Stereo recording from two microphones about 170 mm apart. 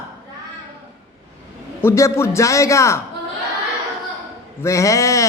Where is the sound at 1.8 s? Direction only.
15° left (ahead or behind).